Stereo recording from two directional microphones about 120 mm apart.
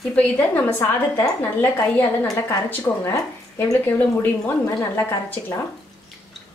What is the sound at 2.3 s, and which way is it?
Speech, 25° left (ahead or behind).